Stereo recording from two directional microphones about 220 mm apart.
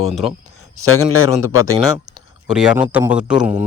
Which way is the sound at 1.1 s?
70° left (ahead or behind).